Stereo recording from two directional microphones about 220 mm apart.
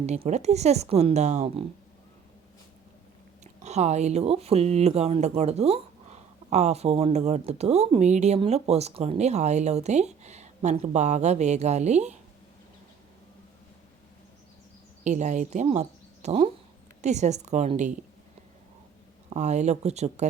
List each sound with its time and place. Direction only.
0.0 s speech: 30° right (ahead or behind)
3.4 s speech: 30° right (ahead or behind)
15.0 s speech: 35° right (ahead or behind)
19.3 s speech: 30° right (ahead or behind)